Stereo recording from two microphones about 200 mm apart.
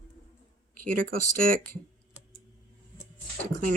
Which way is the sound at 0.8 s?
45° right (ahead or behind).